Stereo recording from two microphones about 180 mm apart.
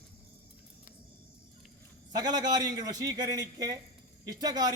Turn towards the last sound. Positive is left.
turn(degrees=-20)  # may be behind; listen again after turning